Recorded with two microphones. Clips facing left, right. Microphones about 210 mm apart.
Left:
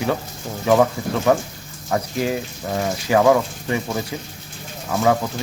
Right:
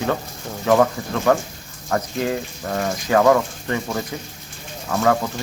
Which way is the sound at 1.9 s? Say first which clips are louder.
Even; 15° left (ahead or behind).